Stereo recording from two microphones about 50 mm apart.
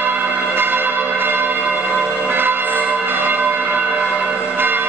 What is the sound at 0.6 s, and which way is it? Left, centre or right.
Church bell, right.